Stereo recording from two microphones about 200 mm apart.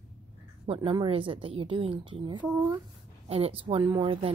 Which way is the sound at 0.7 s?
25° right (ahead or behind).